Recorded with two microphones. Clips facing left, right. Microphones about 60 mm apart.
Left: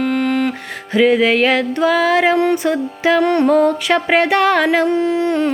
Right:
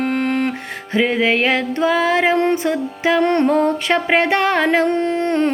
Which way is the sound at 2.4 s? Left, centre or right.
Right.